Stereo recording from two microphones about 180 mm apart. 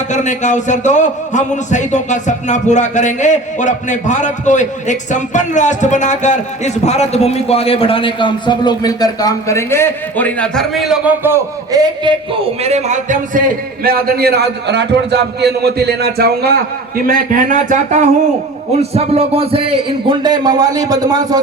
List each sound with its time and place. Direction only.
0.1 s a man's voice: 40° left (ahead or behind); by 13.4 s 40° right (ahead or behind)
13.8 s a man's voice: 55° right (ahead or behind); by 21.3 s 20° right (ahead or behind)